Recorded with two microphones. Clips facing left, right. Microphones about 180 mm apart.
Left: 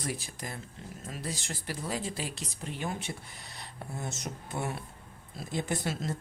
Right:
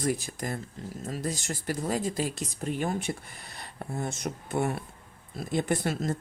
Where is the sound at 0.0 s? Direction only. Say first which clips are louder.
Right 8 dB; 45° right (ahead or behind).